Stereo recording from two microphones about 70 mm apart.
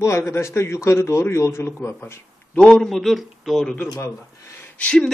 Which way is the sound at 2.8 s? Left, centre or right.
Centre.